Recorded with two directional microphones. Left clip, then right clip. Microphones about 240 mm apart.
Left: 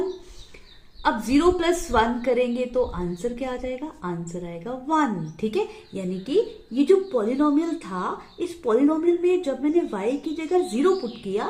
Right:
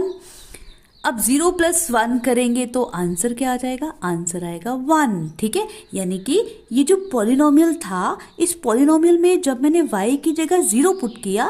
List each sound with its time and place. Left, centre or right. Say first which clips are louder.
1.0 s a woman's voice: right 1 dB; right